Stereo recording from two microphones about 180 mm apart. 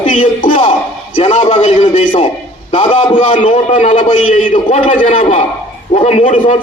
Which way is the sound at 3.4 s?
45° left (ahead or behind).